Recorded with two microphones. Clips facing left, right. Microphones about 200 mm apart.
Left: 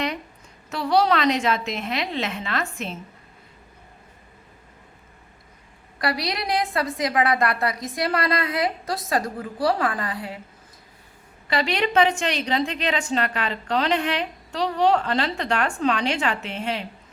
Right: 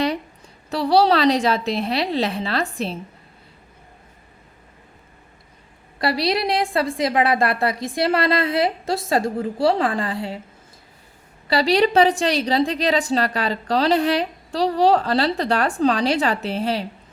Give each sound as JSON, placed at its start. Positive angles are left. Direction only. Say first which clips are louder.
{"t": 0.7, "sound": "a woman's voice", "louder": "right 4 dB", "side_deg": -35}
{"t": 6.0, "sound": "a woman's voice", "louder": "right 5 dB", "side_deg": -25}
{"t": 11.4, "sound": "a woman's voice", "louder": "right 6 dB", "side_deg": -35}